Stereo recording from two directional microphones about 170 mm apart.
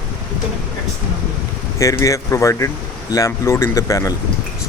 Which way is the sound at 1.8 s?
20° left (ahead or behind).